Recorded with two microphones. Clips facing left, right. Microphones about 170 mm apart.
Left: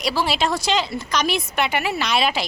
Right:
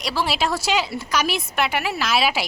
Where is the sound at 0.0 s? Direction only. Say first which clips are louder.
Left 2 dB; centre (ahead or behind).